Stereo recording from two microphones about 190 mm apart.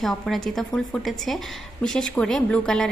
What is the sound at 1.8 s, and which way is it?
A woman's voice, 5° left (ahead or behind).